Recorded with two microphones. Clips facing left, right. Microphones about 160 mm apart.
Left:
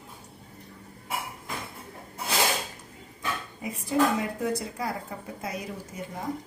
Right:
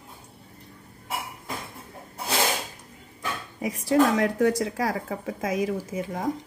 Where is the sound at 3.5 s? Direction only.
90° right.